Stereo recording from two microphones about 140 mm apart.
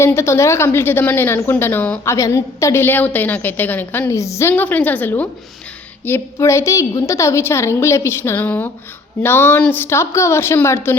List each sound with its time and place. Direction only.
0.0 s a woman's voice: 20° left (ahead or behind)